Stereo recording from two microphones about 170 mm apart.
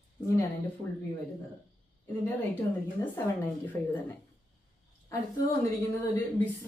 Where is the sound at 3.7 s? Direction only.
15° left (ahead or behind).